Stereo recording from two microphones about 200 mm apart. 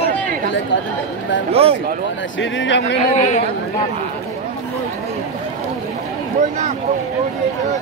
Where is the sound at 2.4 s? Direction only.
65° left (ahead or behind).